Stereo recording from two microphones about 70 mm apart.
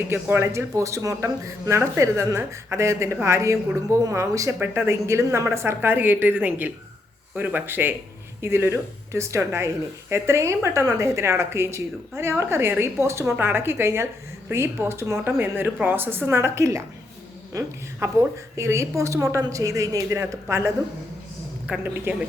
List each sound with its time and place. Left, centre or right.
0.1 s speech: right
4.6 s a woman's voice: right
21.8 s speech: right